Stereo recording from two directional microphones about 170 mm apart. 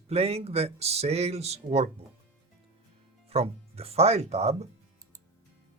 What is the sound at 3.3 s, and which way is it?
Speech, 35° right (ahead or behind).